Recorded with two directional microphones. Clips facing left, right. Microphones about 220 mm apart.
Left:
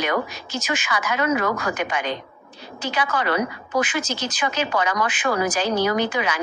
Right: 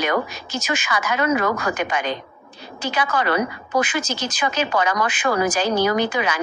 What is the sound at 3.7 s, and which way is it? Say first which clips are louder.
Speech: right 1 dB; 40° right (ahead or behind).